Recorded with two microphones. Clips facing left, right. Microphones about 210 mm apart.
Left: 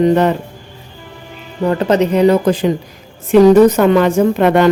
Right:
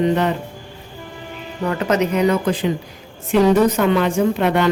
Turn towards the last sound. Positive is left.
turn(degrees=45)  # may be behind; listen again after turning